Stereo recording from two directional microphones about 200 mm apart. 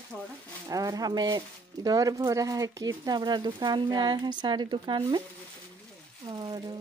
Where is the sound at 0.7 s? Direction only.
20° right (ahead or behind).